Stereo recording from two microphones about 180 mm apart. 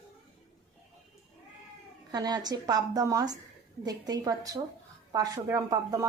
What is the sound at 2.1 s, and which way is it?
Speech, 20° right (ahead or behind).